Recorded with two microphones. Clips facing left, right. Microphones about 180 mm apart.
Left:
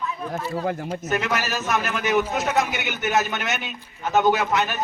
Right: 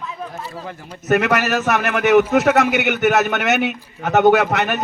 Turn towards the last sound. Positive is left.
turn(degrees=-65)  # may be behind; listen again after turning